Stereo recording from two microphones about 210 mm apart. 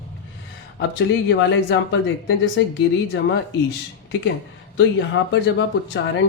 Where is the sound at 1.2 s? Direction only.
55° left (ahead or behind).